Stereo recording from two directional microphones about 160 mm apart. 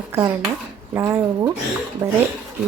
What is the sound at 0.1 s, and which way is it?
Speech, 15° right (ahead or behind).